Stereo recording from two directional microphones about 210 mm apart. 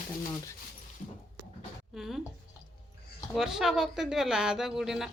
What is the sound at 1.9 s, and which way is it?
Speech, centre (ahead or behind).